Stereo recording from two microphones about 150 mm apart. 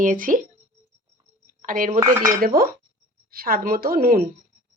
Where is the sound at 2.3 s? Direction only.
75° right (ahead or behind).